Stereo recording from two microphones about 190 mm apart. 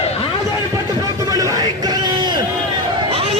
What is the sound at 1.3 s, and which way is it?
Music, 20° right (ahead or behind).